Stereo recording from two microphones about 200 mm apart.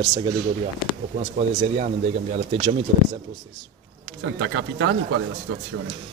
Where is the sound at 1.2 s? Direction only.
35° right (ahead or behind).